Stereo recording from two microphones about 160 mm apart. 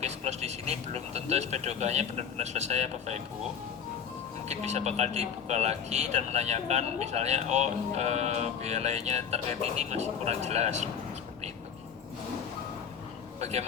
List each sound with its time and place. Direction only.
0.0 s speech: 45° right (ahead or behind)
4.4 s speech: 45° right (ahead or behind)
13.4 s speech: 45° right (ahead or behind)